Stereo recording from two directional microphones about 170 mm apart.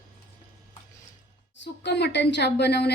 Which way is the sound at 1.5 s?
90° left.